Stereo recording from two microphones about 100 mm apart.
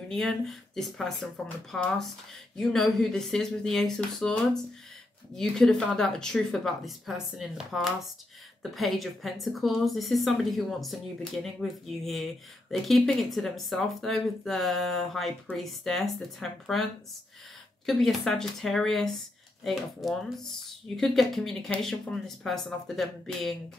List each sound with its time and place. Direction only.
0.1 s speech: centre (ahead or behind)
17.8 s speech: 5° left (ahead or behind)